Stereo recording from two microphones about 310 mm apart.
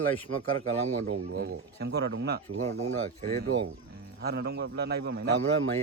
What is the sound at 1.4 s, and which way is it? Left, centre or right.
Speech, right.